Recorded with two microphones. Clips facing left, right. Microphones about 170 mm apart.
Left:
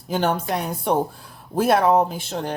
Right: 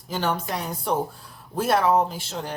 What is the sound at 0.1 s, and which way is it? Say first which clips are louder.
Speech: left 4 dB; 55° left (ahead or behind).